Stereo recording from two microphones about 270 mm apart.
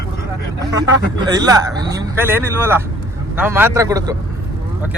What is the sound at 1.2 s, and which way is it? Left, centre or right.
A man's voice, centre.